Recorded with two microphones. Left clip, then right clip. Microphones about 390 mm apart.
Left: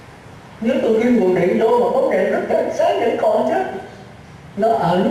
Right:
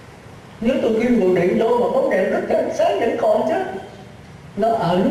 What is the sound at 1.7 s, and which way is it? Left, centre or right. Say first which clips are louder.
Speech: left 2 dB; centre.